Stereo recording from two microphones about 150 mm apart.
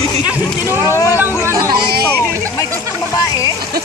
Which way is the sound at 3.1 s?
25° left (ahead or behind).